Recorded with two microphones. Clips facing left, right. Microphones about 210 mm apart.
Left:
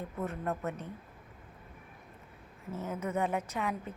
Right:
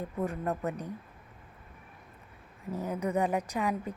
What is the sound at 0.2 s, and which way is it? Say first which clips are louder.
Speech: right 3 dB; 15° right (ahead or behind).